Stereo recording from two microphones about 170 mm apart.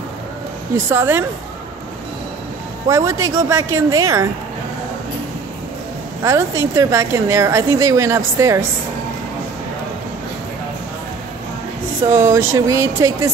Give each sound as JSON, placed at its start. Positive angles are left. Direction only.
{"t": 0.8, "sound": "a woman's voice", "side_deg": -15}
{"t": 2.9, "sound": "a woman's voice", "side_deg": -20}
{"t": 6.2, "sound": "a woman's voice", "side_deg": -15}
{"t": 12.1, "sound": "speech", "side_deg": -50}
{"t": 12.4, "sound": "a woman's voice", "side_deg": -15}